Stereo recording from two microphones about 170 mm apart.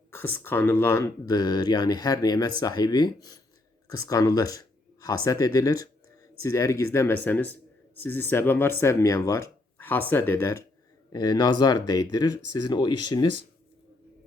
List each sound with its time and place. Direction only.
0.3 s speech: 10° left (ahead or behind)